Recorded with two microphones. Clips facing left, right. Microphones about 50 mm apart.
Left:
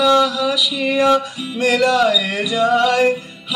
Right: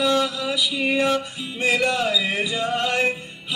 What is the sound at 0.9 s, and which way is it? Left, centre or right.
Music, left.